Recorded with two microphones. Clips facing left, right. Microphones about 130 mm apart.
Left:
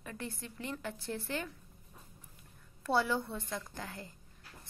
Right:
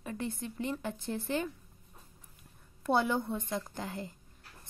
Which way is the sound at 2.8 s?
20° right (ahead or behind).